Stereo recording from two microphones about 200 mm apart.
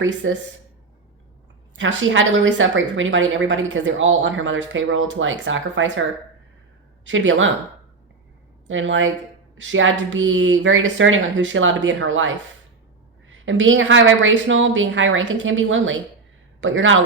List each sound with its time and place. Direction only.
0.0 s speech: 70° right (ahead or behind)
1.7 s speech: 70° right (ahead or behind)
8.6 s a woman's voice: 75° right (ahead or behind)